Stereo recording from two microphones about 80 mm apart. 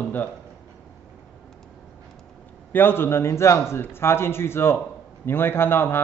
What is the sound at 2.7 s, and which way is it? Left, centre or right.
A man's voice, left.